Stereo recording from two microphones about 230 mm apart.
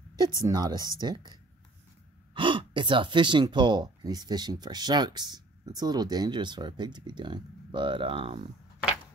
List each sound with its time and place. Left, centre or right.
0.1 s a woman's voice: centre